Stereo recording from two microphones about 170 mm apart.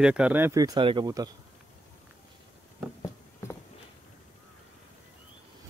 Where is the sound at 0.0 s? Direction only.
5° right (ahead or behind).